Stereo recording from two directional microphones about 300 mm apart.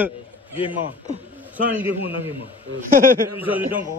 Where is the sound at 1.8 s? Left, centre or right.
Centre.